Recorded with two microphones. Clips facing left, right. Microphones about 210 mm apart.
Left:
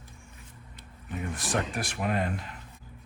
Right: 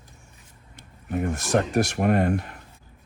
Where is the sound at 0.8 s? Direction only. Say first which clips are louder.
Right 9 dB; 50° right (ahead or behind).